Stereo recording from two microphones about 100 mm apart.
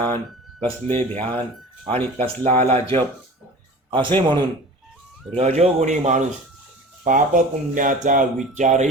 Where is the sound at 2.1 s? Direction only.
80° right.